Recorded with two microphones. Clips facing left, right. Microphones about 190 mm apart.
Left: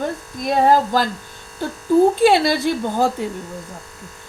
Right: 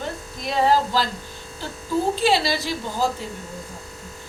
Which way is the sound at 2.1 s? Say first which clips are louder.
Left 6 dB; 55° left (ahead or behind).